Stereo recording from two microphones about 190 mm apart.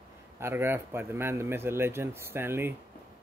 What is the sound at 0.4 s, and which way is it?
Speech, 15° right (ahead or behind).